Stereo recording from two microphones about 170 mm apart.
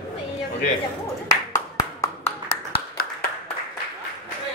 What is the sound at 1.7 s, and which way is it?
Clapping, 20° left (ahead or behind).